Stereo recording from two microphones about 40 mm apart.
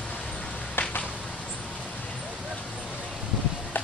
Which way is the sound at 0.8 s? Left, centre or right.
Left.